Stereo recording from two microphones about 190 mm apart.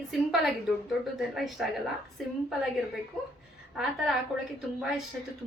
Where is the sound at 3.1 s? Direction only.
Centre (ahead or behind).